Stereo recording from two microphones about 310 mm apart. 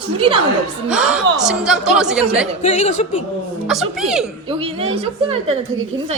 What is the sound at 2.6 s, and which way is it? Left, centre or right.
Speech, left.